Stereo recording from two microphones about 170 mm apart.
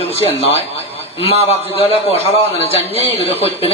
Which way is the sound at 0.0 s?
35° left (ahead or behind).